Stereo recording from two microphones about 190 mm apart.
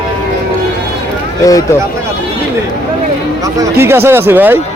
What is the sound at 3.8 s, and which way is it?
Speech, 10° right (ahead or behind).